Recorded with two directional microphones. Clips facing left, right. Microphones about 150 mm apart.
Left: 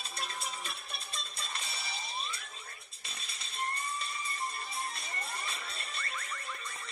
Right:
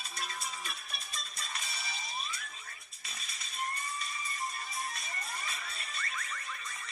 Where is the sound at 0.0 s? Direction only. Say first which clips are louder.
Left 1 dB; 30° left (ahead or behind).